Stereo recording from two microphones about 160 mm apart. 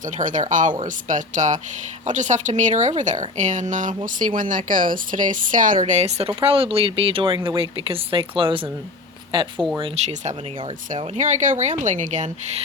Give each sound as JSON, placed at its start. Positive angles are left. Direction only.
{"t": 0.0, "sound": "speech", "side_deg": -55}
{"t": 9.9, "sound": "speech", "side_deg": -45}